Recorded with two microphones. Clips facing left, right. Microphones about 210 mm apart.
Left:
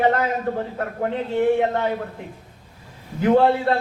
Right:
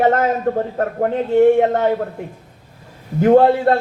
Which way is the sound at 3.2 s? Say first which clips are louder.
Right 5 dB; 40° right (ahead or behind).